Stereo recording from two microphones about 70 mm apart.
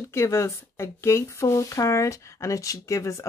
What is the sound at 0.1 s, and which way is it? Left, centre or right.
Speech, left.